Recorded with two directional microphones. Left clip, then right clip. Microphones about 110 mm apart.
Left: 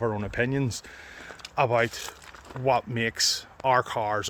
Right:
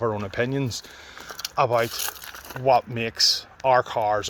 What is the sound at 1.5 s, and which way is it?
Speech, 35° left (ahead or behind).